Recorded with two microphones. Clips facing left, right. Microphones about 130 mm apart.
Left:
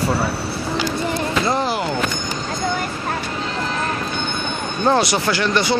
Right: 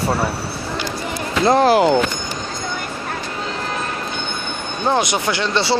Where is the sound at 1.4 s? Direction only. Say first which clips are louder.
Right 12 dB; 65° right (ahead or behind).